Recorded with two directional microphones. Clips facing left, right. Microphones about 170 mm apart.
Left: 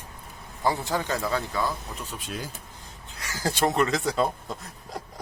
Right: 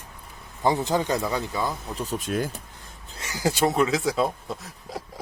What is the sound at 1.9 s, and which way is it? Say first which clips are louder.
Speech: right 8 dB; 35° right (ahead or behind).